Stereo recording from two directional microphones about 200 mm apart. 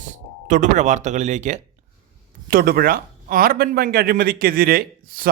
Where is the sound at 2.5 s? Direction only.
50° right (ahead or behind).